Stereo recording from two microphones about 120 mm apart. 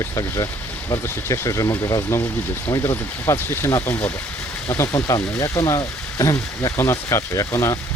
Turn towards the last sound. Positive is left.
turn(degrees=25)  # may be behind; listen again after turning